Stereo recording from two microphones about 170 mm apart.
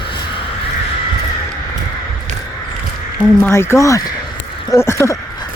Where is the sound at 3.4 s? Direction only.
15° left (ahead or behind).